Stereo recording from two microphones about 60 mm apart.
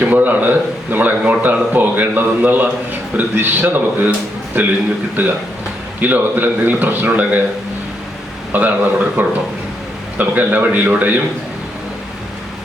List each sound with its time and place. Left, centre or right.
0.0 s a man's voice: right
8.5 s a man's voice: right